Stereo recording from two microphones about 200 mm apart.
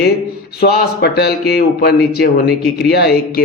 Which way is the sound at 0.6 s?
55° left (ahead or behind).